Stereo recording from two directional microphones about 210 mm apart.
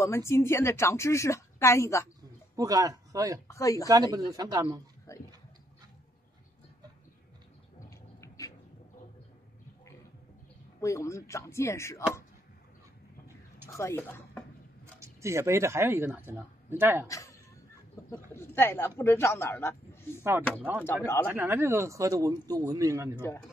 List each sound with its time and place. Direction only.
0.0 s a woman's voice: 10° left (ahead or behind)
2.5 s speech: 15° right (ahead or behind)
3.4 s a woman's voice: 15° left (ahead or behind)
3.9 s a man's voice: 15° right (ahead or behind)
5.1 s a sound: 15° left (ahead or behind)
8.2 s a sound: 15° left (ahead or behind)
10.8 s a woman's voice: 15° left (ahead or behind)
13.7 s speech: 15° left (ahead or behind)
15.0 s speech: 15° right (ahead or behind)
17.1 s a sound: 15° left (ahead or behind)
18.9 s a woman's voice: 10° left (ahead or behind)
21.3 s a man's voice: 10° right (ahead or behind)